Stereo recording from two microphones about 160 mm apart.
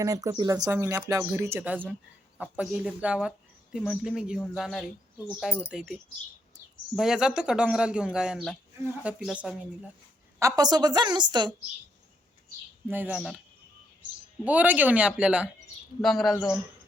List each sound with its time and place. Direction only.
0.0 s speech: 20° right (ahead or behind); by 9.6 s 5° right (ahead or behind)
10.4 s a woman's voice: 25° right (ahead or behind)
12.9 s speech: 10° right (ahead or behind)
13.1 s speech: centre (ahead or behind)
14.4 s speech: 10° right (ahead or behind)
16.3 s speech: 20° left (ahead or behind)